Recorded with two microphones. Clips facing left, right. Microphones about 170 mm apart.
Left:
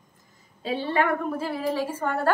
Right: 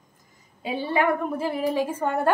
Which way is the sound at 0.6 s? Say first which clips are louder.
Right 1 dB; 10° right (ahead or behind).